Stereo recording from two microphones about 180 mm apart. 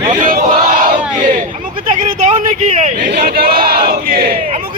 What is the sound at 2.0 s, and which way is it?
Speech, 45° right (ahead or behind).